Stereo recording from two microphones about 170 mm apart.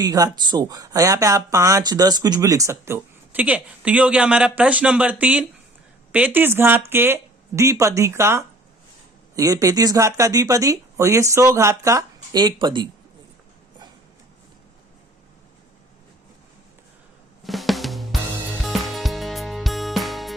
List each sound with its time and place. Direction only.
0.0 s speech: 20° right (ahead or behind)
17.4 s music: centre (ahead or behind)